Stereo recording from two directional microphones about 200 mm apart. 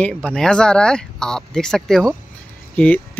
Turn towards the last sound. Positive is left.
turn(degrees=5)  # may be behind; listen again after turning